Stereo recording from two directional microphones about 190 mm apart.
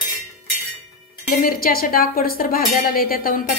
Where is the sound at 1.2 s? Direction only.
50° left (ahead or behind).